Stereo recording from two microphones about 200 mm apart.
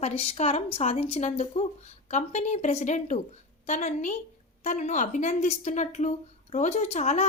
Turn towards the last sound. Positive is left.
turn(degrees=35)  # may be behind; listen again after turning